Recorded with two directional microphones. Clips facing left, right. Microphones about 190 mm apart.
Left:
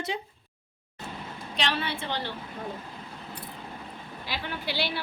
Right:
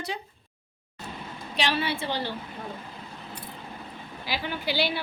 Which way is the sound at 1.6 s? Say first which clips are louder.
Right 3 dB; 10° right (ahead or behind).